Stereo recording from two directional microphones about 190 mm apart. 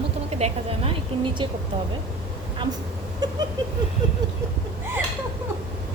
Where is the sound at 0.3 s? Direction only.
35° right (ahead or behind).